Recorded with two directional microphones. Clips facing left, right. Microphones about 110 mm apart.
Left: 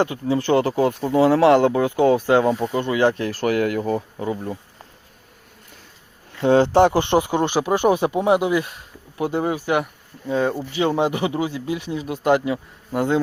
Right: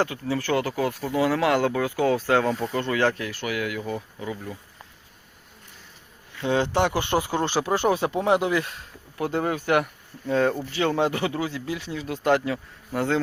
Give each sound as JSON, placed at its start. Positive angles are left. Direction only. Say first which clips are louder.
{"t": 0.0, "sound": "speech", "louder": "left 5 dB", "side_deg": 20}
{"t": 3.2, "sound": "speech", "louder": "left 8 dB", "side_deg": 40}
{"t": 6.5, "sound": "speech", "louder": "left 8 dB", "side_deg": 35}